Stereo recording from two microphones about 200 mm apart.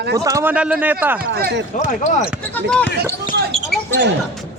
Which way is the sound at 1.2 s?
50° right (ahead or behind).